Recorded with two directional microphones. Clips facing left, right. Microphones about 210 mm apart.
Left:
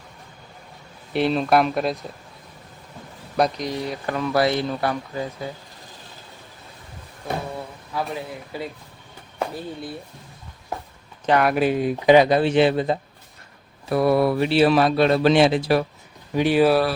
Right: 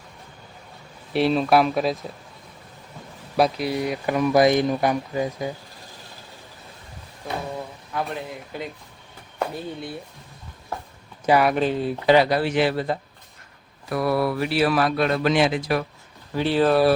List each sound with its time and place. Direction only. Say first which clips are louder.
1.1 s speech: right 1 dB; centre (ahead or behind)
3.3 s speech: right 1 dB; 5° right (ahead or behind)
7.9 s speech: left 1 dB; 5° left (ahead or behind)
11.3 s speech: right 1 dB; 5° right (ahead or behind)
11.5 s speech: left 2 dB; 10° left (ahead or behind); by 15.8 s 30° left (ahead or behind)
16.3 s speech: left 2 dB; 15° left (ahead or behind)